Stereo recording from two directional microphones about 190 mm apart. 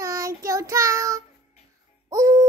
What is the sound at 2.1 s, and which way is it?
Music, 15° right (ahead or behind).